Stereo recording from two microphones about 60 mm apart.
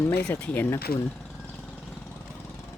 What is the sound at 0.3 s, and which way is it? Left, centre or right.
Speech, left.